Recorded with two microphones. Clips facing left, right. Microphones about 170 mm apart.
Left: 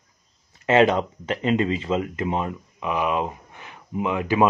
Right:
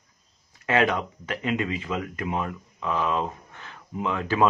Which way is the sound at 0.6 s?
25° left (ahead or behind).